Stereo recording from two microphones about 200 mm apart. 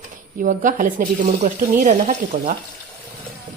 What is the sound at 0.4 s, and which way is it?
A woman's voice, 40° right (ahead or behind).